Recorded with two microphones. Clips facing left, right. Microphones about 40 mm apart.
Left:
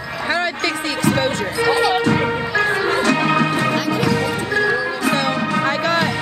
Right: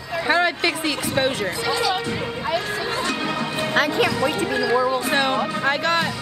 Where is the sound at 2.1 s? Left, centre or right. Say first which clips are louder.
Left 6 dB; left.